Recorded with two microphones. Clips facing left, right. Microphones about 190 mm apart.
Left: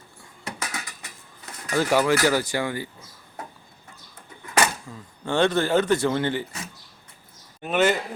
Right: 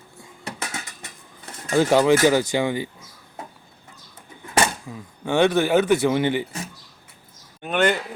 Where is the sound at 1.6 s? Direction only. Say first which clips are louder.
Right 4 dB; 20° right (ahead or behind).